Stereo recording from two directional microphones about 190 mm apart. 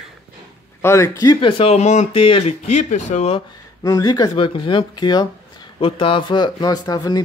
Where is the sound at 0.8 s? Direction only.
15° left (ahead or behind); by 3.5 s 30° left (ahead or behind).